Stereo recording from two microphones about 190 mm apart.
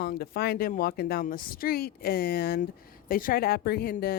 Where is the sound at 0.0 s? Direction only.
55° left (ahead or behind).